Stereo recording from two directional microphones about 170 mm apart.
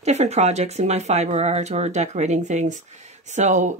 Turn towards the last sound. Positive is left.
turn(degrees=-45)  # may be behind; listen again after turning